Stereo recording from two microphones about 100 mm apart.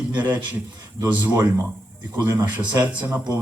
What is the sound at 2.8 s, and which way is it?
Speech, 15° right (ahead or behind).